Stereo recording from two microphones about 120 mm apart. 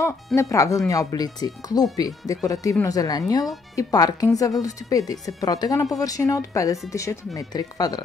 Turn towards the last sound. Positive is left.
turn(degrees=35)  # may be behind; listen again after turning